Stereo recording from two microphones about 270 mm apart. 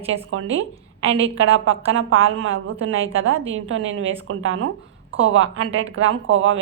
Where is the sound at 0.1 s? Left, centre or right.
Right.